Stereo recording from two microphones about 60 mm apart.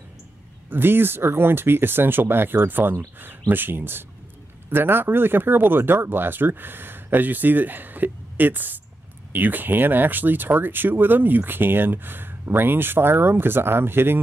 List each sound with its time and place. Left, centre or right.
0.7 s speech: right